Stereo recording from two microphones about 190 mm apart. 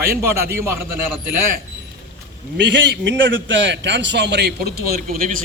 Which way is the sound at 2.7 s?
70° right (ahead or behind).